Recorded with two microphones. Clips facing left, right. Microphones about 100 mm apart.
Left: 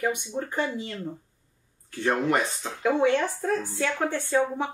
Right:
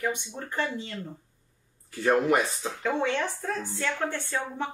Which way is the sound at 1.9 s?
5° right (ahead or behind).